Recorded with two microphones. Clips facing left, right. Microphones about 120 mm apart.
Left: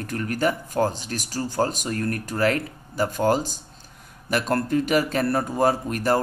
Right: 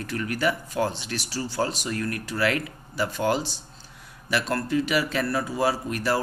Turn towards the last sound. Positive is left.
turn(degrees=45)  # may be behind; listen again after turning